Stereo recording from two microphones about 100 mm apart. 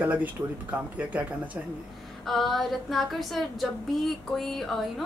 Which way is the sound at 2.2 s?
Centre (ahead or behind).